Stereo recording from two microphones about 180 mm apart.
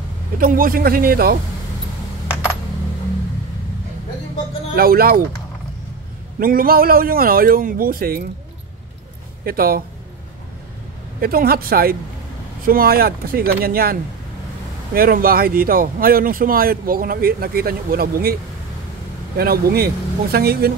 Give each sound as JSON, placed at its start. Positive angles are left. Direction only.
{"t": 0.4, "sound": "speech", "side_deg": -50}
{"t": 4.7, "sound": "speech", "side_deg": -55}
{"t": 6.4, "sound": "speech", "side_deg": -55}
{"t": 9.4, "sound": "speech", "side_deg": -55}
{"t": 11.1, "sound": "speech", "side_deg": -55}
{"t": 15.0, "sound": "speech", "side_deg": -55}